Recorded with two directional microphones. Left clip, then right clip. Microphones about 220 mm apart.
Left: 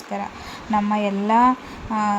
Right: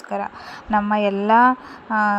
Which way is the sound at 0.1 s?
25° right (ahead or behind).